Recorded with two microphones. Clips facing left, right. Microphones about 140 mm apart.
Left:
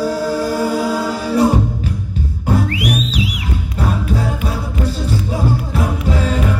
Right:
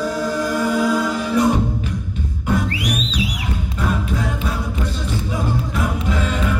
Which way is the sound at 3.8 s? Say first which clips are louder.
Left 3 dB; 35° left (ahead or behind).